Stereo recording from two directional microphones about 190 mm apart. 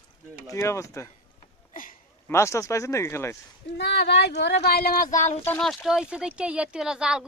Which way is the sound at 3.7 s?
65° left (ahead or behind).